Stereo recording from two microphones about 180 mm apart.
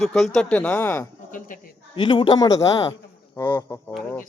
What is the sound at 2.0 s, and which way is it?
A man's voice, 25° left (ahead or behind).